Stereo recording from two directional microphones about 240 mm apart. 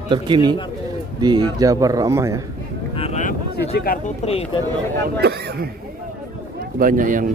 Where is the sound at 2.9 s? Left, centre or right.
Left.